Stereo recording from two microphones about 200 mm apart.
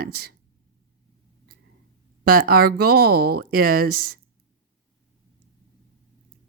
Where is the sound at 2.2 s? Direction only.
50° right (ahead or behind).